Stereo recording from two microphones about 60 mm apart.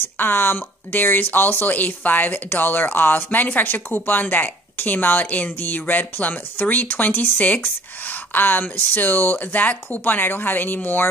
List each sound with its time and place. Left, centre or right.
0.2 s speech: left